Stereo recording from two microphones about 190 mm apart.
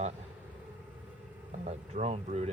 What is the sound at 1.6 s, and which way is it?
Speech, 35° right (ahead or behind).